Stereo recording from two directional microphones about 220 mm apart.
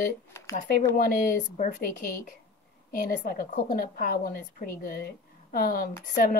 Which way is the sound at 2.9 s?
40° left (ahead or behind).